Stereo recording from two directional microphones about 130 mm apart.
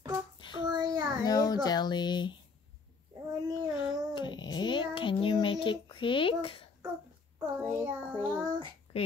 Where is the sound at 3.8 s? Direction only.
35° left (ahead or behind).